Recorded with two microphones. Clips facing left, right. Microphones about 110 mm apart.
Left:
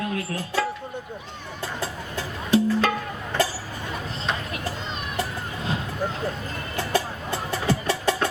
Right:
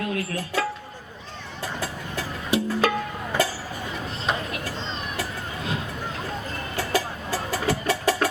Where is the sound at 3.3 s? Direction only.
10° right (ahead or behind).